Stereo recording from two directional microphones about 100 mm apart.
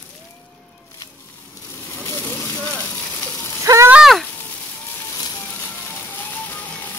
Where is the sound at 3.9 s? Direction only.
Centre (ahead or behind).